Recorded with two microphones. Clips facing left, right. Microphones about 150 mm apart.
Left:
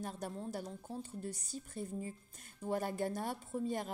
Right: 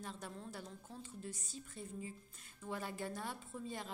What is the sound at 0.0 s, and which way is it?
A woman's voice, 40° left (ahead or behind).